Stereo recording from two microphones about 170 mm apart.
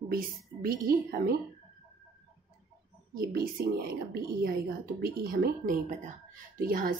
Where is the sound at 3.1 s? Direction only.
65° right (ahead or behind).